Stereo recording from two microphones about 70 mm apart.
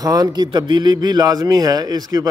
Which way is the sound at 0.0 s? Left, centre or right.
Right.